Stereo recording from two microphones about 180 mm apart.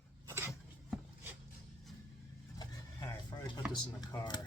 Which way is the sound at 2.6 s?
20° left (ahead or behind).